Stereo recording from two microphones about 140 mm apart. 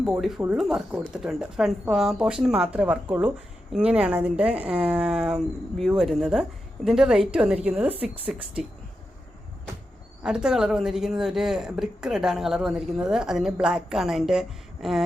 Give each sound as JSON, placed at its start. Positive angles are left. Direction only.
{"t": 0.0, "sound": "speech", "side_deg": 0}
{"t": 7.9, "sound": "speech", "side_deg": -40}
{"t": 10.2, "sound": "speech", "side_deg": -5}